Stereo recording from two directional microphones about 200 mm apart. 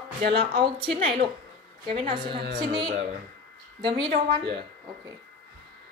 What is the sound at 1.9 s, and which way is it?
Speech, 25° right (ahead or behind).